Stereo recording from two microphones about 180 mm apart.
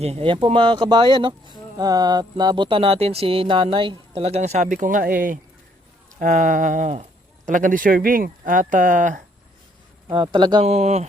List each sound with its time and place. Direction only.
0.0 s speech: 35° right (ahead or behind)
10.1 s speech: 25° right (ahead or behind)